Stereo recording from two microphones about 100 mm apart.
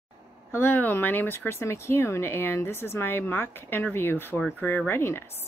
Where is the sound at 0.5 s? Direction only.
20° left (ahead or behind).